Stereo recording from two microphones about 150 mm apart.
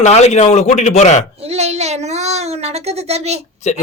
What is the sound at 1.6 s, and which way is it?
Speech, 45° right (ahead or behind).